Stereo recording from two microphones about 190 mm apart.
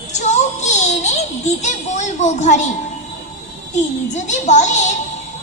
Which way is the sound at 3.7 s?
35° left (ahead or behind).